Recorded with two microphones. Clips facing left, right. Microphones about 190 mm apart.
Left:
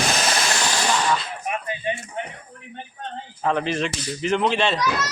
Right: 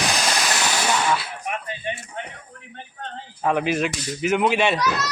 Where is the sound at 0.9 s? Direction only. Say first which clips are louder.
Even; 5° right (ahead or behind).